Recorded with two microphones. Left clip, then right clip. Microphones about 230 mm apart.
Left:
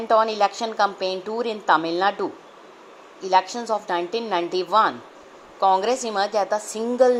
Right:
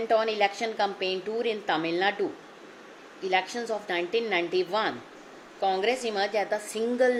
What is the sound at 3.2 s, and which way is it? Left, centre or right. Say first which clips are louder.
A woman's voice: left 7 dB; centre.